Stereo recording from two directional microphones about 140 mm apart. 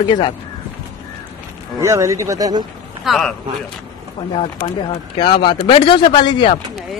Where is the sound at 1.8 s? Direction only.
20° right (ahead or behind).